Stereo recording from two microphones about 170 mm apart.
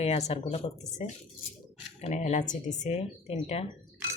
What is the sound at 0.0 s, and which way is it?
Speech, 40° left (ahead or behind).